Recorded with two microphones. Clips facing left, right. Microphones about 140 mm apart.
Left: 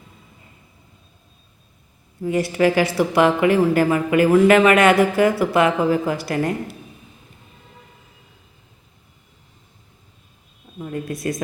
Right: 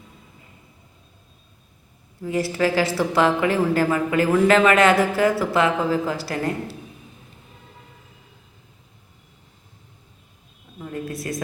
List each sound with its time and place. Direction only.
2.2 s speech: 20° left (ahead or behind)
11.1 s a woman's voice: 30° right (ahead or behind)